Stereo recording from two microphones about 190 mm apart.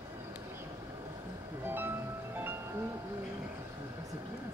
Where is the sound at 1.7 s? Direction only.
10° right (ahead or behind).